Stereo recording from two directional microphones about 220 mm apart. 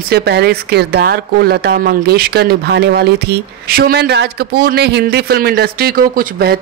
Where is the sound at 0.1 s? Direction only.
45° right (ahead or behind).